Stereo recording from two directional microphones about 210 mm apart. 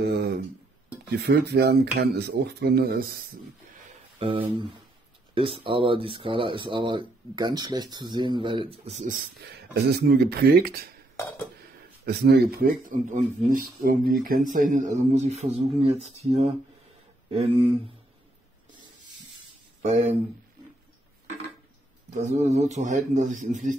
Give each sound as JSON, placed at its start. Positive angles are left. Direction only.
{"t": 0.0, "sound": "speech", "side_deg": -50}
{"t": 4.2, "sound": "speech", "side_deg": -25}
{"t": 11.1, "sound": "a sound", "side_deg": 10}
{"t": 12.0, "sound": "speech", "side_deg": -50}
{"t": 22.1, "sound": "speech", "side_deg": -35}